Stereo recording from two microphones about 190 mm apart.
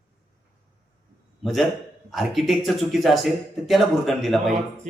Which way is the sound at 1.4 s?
Centre (ahead or behind).